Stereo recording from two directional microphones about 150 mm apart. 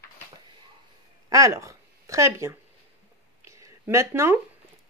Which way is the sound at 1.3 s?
20° right (ahead or behind).